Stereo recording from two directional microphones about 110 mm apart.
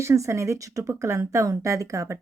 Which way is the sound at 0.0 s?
25° right (ahead or behind).